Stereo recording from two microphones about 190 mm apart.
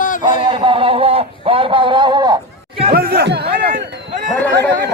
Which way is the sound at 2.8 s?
50° right (ahead or behind).